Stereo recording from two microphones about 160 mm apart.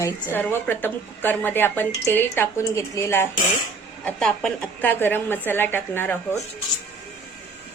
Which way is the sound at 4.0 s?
5° left (ahead or behind).